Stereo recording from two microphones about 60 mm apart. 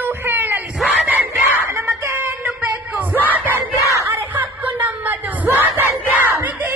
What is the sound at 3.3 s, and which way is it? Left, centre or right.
Battle cry, right.